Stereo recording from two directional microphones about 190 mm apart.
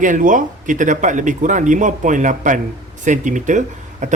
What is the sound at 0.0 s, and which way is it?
A man's voice, 45° right (ahead or behind).